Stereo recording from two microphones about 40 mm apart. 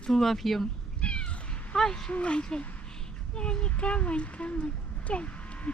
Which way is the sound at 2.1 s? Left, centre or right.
Left.